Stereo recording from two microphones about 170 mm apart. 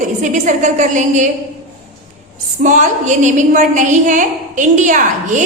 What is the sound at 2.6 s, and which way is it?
A woman's voice, 45° right (ahead or behind).